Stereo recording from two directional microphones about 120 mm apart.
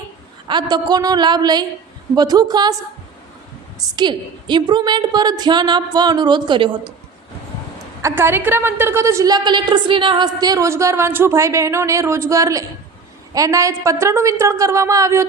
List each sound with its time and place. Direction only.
0.4 s a woman's voice: 35° right (ahead or behind)
3.8 s a woman's voice: 40° right (ahead or behind)
8.0 s a woman's voice: 20° right (ahead or behind)